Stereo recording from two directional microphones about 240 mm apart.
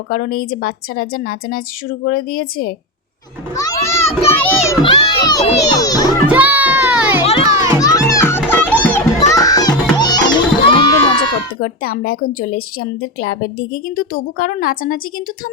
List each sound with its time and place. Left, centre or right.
0.1 s a woman's voice: left
3.5 s children playing: centre
4.8 s a child's voice: centre
6.2 s music: centre
7.2 s music: left
7.8 s children playing: centre
8.4 s music: centre
11.6 s a woman's voice: left